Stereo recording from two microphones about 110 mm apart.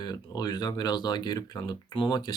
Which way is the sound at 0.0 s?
40° left (ahead or behind).